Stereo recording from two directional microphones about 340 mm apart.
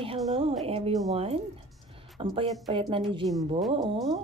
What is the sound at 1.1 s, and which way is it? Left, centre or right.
Speech, centre.